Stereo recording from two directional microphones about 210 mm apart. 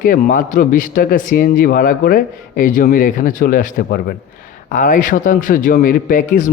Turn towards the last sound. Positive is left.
turn(degrees=40)  # may be behind; listen again after turning